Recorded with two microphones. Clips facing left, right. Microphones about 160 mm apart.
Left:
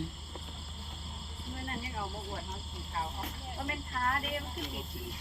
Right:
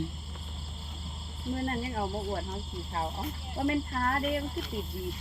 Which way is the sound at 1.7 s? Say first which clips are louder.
Right 4 dB; 45° right (ahead or behind).